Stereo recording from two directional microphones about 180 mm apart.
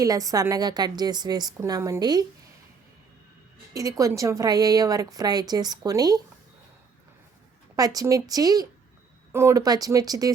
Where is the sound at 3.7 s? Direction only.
20° right (ahead or behind).